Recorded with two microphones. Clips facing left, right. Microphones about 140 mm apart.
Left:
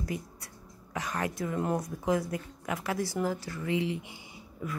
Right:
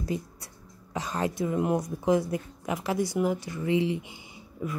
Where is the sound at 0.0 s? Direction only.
25° right (ahead or behind).